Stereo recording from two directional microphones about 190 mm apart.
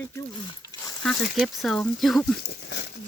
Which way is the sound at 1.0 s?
Centre (ahead or behind).